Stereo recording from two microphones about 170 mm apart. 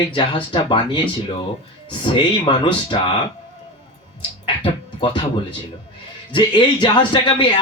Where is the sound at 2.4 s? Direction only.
25° left (ahead or behind).